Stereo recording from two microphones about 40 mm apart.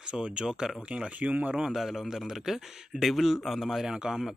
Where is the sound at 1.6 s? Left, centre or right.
Centre.